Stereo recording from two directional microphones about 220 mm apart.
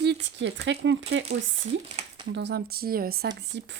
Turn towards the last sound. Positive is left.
turn(degrees=-50)  # may be behind; listen again after turning